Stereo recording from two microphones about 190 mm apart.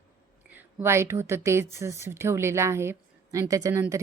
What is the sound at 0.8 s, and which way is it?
A woman's voice, 15° right (ahead or behind).